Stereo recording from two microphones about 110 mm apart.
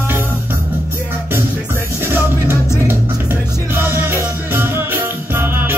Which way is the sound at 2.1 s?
20° right (ahead or behind).